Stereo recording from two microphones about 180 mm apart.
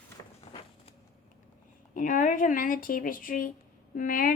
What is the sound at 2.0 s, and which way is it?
Speech, 45° left (ahead or behind).